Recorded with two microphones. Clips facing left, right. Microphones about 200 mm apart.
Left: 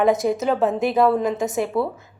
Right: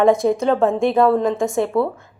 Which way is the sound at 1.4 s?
20° left (ahead or behind).